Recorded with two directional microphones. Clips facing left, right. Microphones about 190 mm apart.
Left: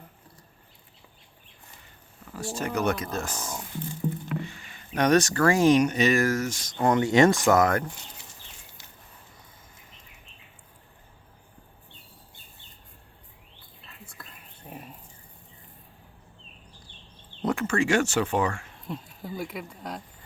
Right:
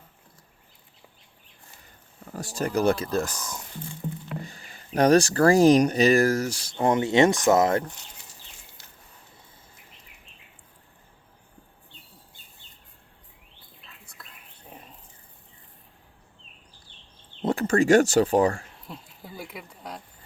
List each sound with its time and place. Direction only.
2.3 s speech: 40° right (ahead or behind)
6.7 s speech: 20° right (ahead or behind)
14.7 s dog: 10° left (ahead or behind)
17.4 s speech: 35° right (ahead or behind)
18.9 s speech: centre (ahead or behind)